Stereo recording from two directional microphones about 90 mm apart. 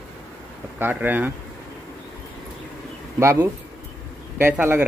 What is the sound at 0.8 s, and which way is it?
Speech, 20° right (ahead or behind).